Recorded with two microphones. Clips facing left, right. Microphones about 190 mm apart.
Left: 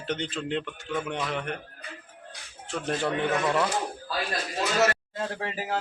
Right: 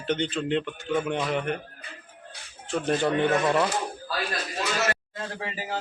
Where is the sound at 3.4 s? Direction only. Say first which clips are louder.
Right 2 dB; 20° right (ahead or behind).